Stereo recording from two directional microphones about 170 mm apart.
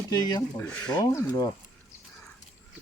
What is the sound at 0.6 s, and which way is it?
Speech, 5° left (ahead or behind).